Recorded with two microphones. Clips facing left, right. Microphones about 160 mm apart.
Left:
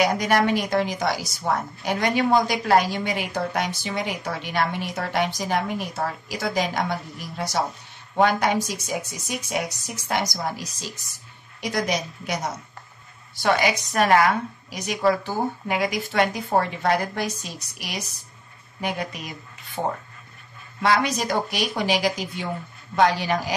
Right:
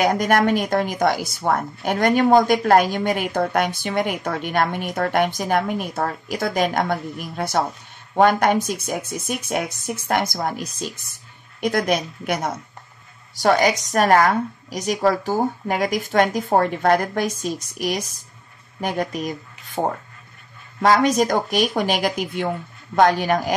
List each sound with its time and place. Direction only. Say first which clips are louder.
0.0 s a woman's voice: right 3 dB; 50° right (ahead or behind)
13.4 s a woman's voice: right 4 dB; 40° right (ahead or behind)
20.8 s a woman's voice: right 5 dB; 45° right (ahead or behind)